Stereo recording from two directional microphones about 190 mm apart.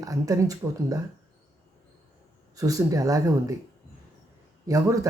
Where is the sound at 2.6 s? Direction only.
15° right (ahead or behind).